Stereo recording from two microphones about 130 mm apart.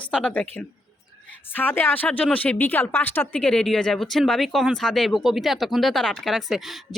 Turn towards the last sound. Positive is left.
turn(degrees=0)  # may be behind; listen again after turning